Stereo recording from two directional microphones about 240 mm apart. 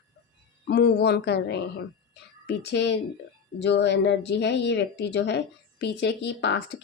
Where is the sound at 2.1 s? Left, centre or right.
Left.